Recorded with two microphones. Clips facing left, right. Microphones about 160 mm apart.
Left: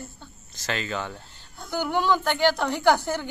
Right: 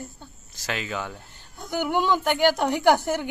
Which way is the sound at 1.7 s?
20° right (ahead or behind).